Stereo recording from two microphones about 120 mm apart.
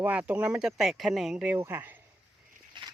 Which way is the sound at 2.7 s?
40° right (ahead or behind).